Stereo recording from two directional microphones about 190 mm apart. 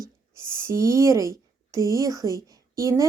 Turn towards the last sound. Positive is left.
turn(degrees=-15)  # may be behind; listen again after turning